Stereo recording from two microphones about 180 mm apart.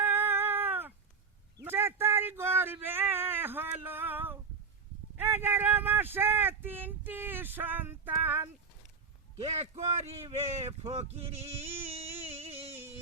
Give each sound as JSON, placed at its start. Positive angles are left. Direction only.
{"t": 0.0, "sound": "a sound", "side_deg": -10}
{"t": 5.1, "sound": "speech", "side_deg": -10}
{"t": 9.4, "sound": "speech", "side_deg": -35}